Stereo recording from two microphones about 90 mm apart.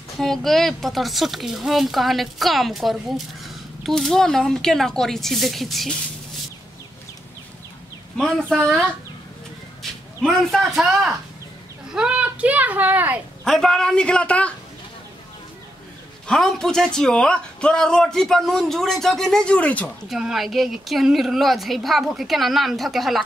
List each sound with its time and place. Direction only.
0.2 s speech: 5° left (ahead or behind)
8.2 s speech: 5° left (ahead or behind)
10.2 s a child's voice: centre (ahead or behind); by 13.2 s 20° right (ahead or behind)
13.4 s a man's voice: 5° left (ahead or behind)
16.3 s speech: 5° left (ahead or behind)
20.1 s speech: 5° right (ahead or behind)